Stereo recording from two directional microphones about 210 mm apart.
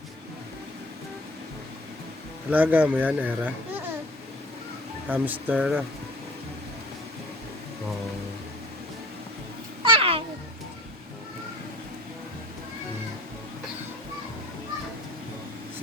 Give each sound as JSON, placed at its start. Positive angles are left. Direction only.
{"t": 2.5, "sound": "speech", "side_deg": -10}
{"t": 5.0, "sound": "speech", "side_deg": -10}
{"t": 9.8, "sound": "a sound", "side_deg": -25}